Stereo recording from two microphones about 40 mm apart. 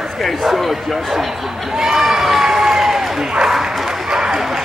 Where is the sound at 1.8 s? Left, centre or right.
Centre.